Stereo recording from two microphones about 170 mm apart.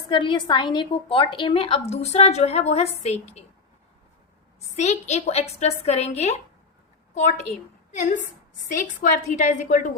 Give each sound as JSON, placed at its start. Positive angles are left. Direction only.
{"t": 0.1, "sound": "a woman's voice", "side_deg": 30}
{"t": 4.8, "sound": "a woman's voice", "side_deg": 40}